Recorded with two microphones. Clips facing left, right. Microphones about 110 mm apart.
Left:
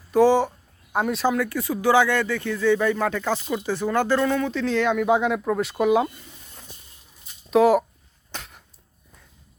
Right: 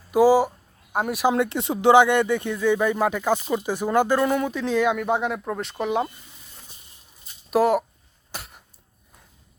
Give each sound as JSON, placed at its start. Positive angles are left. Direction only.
{"t": 0.1, "sound": "speech", "side_deg": -10}
{"t": 1.3, "sound": "speech", "side_deg": -25}
{"t": 4.9, "sound": "speech", "side_deg": 0}
{"t": 7.5, "sound": "speech", "side_deg": 0}
{"t": 8.3, "sound": "cough", "side_deg": -5}